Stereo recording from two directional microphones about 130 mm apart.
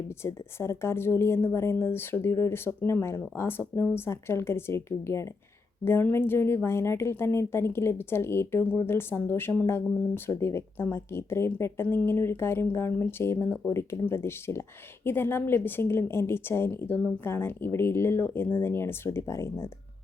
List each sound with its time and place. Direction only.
0.2 s a woman's voice: 20° left (ahead or behind)